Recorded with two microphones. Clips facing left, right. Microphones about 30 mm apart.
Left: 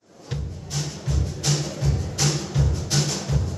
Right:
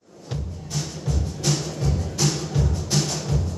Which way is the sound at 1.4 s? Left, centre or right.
Centre.